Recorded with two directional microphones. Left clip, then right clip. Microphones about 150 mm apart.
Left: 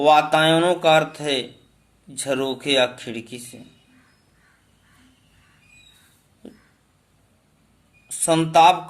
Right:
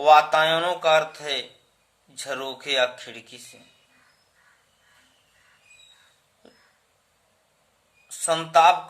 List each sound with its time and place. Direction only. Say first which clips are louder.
0.0 s speech: left 1 dB; 20° left (ahead or behind)
8.0 s speech: left 5 dB; 15° left (ahead or behind)